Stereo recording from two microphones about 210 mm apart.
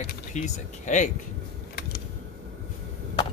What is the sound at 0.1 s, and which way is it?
Speech, 35° left (ahead or behind).